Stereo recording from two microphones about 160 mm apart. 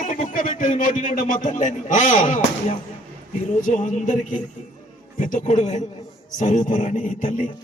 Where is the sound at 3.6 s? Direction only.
55° left (ahead or behind).